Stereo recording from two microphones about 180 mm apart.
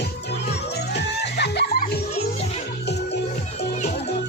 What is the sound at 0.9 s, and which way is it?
Music, 70° left (ahead or behind).